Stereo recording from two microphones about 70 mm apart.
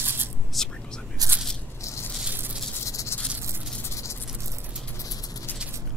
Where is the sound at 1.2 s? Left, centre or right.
Right.